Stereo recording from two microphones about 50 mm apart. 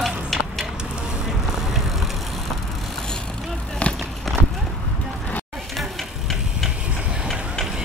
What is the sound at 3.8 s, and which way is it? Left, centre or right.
Run, left.